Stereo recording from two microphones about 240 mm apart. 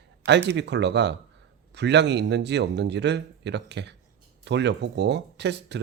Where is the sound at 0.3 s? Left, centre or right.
Right.